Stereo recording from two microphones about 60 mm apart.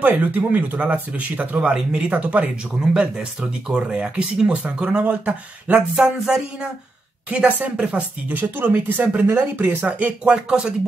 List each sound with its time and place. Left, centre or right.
0.0 s speech: right; by 6.7 s centre
7.2 s speech: right